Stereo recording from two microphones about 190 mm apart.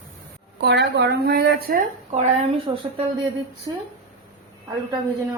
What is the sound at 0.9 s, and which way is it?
Speech, 60° right (ahead or behind).